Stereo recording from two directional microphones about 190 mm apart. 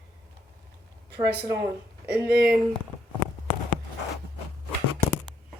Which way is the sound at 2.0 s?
55° right (ahead or behind).